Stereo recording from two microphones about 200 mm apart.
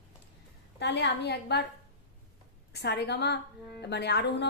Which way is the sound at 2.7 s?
55° left (ahead or behind).